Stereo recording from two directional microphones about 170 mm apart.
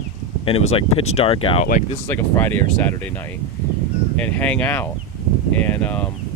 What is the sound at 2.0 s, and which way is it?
Speech, 10° left (ahead or behind).